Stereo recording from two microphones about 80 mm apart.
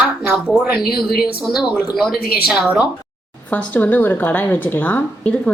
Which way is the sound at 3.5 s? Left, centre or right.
Centre.